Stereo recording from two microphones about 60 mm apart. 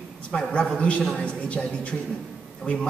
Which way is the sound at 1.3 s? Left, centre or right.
Left.